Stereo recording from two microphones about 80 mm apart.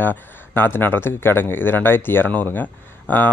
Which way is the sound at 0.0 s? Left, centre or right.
Left.